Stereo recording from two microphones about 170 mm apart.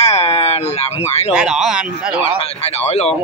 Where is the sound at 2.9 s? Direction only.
40° left (ahead or behind).